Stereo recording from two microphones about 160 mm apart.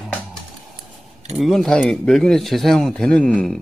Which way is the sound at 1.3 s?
Centre (ahead or behind).